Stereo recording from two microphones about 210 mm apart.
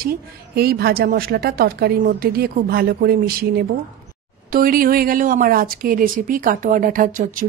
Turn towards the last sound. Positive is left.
turn(degrees=-40)  # may be behind; listen again after turning